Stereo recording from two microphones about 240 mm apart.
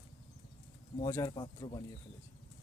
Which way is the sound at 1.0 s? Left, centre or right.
Centre.